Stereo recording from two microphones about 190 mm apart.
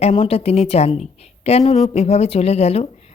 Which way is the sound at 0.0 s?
30° left (ahead or behind).